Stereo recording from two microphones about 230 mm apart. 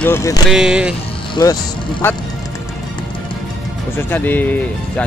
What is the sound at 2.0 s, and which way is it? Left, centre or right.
Speech, centre.